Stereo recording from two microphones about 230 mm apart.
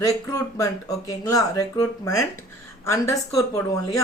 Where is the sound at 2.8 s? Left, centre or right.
Centre.